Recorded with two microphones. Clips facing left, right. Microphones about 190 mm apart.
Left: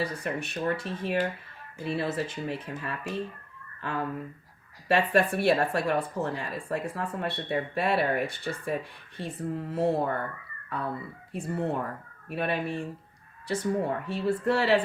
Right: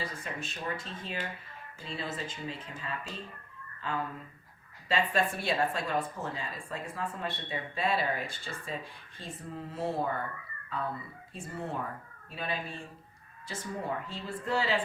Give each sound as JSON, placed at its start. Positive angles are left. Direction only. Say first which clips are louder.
{"t": 0.0, "sound": "a woman's voice", "louder": "left 7 dB", "side_deg": 70}